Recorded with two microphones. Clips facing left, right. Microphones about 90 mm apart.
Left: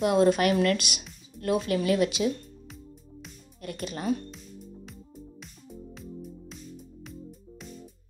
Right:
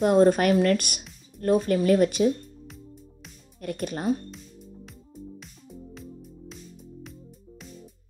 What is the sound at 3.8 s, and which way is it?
Speech, 40° right (ahead or behind).